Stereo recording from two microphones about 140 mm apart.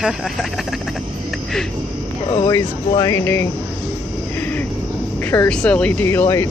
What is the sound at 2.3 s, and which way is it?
Speech, 25° left (ahead or behind).